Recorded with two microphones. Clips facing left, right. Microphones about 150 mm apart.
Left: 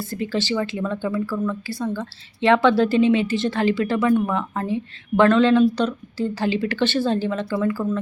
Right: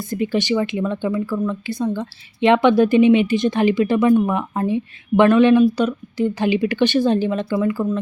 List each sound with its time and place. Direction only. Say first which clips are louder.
0.0 s speech: right 4 dB; 15° right (ahead or behind)